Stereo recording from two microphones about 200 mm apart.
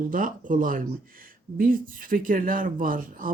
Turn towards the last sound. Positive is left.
turn(degrees=-45)  # may be behind; listen again after turning